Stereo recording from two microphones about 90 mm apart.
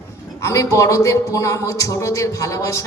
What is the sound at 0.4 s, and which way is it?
Speech, 35° left (ahead or behind).